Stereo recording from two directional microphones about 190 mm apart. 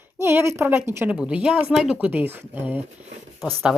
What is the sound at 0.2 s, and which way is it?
A woman's voice, 15° right (ahead or behind).